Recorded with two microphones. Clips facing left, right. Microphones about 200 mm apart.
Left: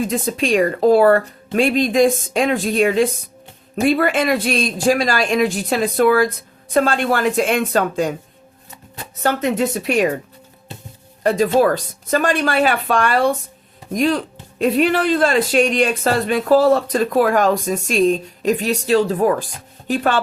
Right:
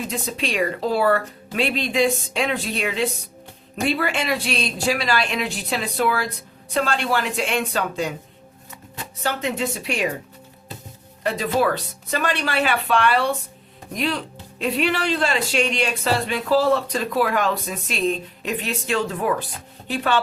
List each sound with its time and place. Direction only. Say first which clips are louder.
0.1 s speech: left 8 dB; 50° left (ahead or behind)
9.2 s speech: left 6 dB; 45° left (ahead or behind)
11.2 s speech: left 7 dB; 45° left (ahead or behind)